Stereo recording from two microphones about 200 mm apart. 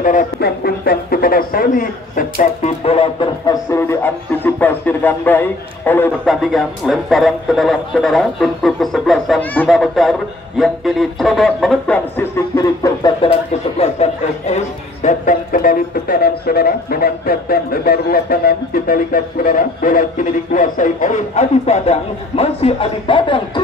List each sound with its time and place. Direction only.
0.0 s speech: 40° left (ahead or behind); by 3.5 s 25° left (ahead or behind)
3.7 s speech: 10° left (ahead or behind)